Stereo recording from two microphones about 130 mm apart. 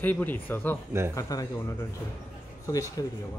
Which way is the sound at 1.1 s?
25° left (ahead or behind).